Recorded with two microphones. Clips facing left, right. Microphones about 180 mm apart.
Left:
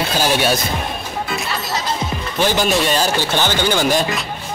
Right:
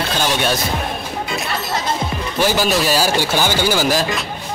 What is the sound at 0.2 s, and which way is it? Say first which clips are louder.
Speech: left 2 dB; 5° left (ahead or behind).